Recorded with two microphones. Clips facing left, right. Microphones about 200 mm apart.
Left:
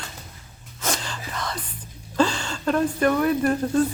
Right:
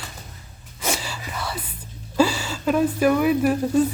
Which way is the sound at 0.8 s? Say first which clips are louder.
Right 1 dB; 10° right (ahead or behind).